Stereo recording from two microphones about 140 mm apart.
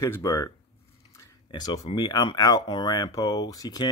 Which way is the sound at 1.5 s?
30° left (ahead or behind).